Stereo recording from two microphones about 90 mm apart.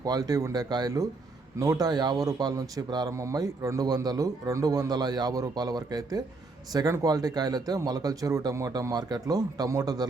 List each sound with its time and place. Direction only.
0.0 s a man's voice: 45° right (ahead or behind)
3.1 s a man's voice: 35° right (ahead or behind)